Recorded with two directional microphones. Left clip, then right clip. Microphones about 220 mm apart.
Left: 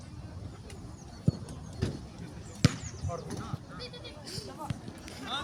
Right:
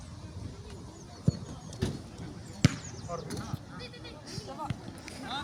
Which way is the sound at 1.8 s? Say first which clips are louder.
Right 1 dB; 50° right (ahead or behind).